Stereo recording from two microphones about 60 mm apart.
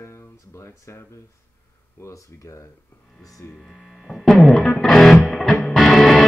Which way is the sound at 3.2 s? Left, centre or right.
Left.